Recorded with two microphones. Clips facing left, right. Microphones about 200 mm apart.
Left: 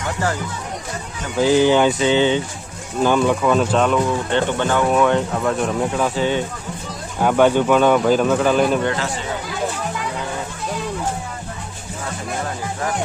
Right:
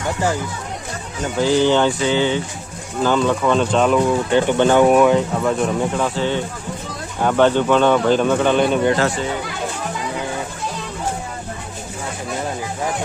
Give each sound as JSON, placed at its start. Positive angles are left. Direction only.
{"t": 1.4, "sound": "speech", "side_deg": 15}
{"t": 4.5, "sound": "speech", "side_deg": -20}
{"t": 4.9, "sound": "speech", "side_deg": -5}
{"t": 6.1, "sound": "speech", "side_deg": 15}